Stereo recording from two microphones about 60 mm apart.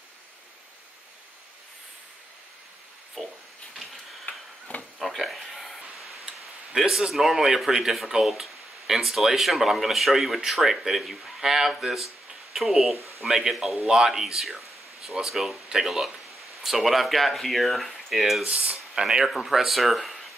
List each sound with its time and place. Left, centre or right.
3.2 s speech: centre
3.7 s tick-tock: centre
4.3 s a sound: left
4.9 s speech: centre
18.4 s speech: centre